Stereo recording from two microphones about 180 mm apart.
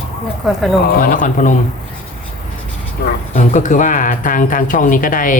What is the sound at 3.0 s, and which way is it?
Speech, 60° left (ahead or behind).